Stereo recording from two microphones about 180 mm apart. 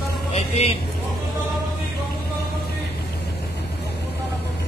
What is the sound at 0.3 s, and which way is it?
Speech, 35° left (ahead or behind).